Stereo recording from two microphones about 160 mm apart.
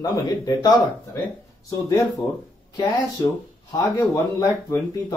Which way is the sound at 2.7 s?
25° left (ahead or behind).